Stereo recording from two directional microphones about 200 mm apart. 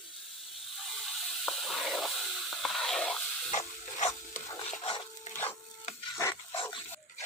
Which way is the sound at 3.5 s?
35° left (ahead or behind).